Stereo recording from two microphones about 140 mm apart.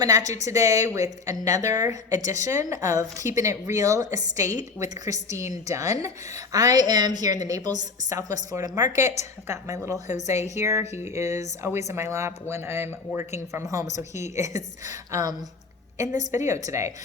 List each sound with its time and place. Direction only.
0.0 s a woman's voice: 25° right (ahead or behind)